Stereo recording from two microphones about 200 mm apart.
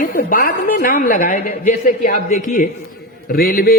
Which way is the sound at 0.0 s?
45° left (ahead or behind).